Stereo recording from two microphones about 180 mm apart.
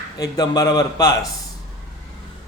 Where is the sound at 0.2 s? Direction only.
20° left (ahead or behind).